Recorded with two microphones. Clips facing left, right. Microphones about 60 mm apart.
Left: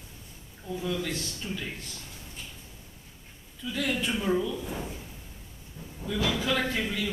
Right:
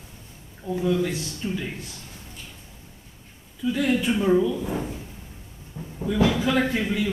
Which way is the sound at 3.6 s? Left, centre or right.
Centre.